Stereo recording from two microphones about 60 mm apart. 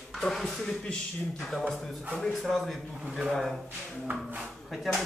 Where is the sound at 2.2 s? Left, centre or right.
Centre.